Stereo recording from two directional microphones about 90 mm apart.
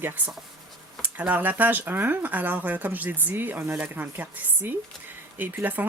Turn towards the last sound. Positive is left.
turn(degrees=-20)  # may be behind; listen again after turning